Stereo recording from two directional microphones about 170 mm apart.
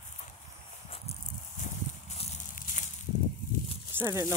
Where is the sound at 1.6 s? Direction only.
40° left (ahead or behind).